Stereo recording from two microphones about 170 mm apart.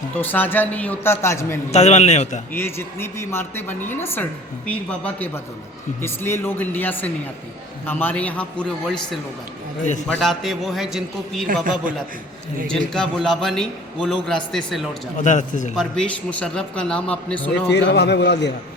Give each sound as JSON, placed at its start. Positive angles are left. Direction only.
{"t": 0.2, "sound": "a woman's voice", "side_deg": 10}
{"t": 1.7, "sound": "a man's voice", "side_deg": 40}
{"t": 2.5, "sound": "a woman's voice", "side_deg": 15}
{"t": 12.6, "sound": "a man's voice", "side_deg": 5}
{"t": 15.2, "sound": "a man's voice", "side_deg": 45}
{"t": 15.7, "sound": "a man's voice", "side_deg": 5}
{"t": 17.5, "sound": "a man's voice", "side_deg": 80}